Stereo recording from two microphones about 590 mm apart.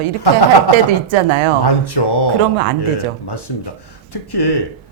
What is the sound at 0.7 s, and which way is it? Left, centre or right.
Speech, left.